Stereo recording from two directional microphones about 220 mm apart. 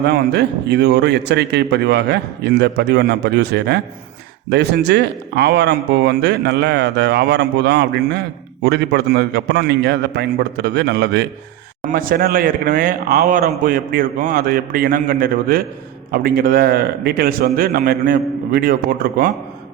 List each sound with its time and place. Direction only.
0.1 s a man's voice: 50° right (ahead or behind)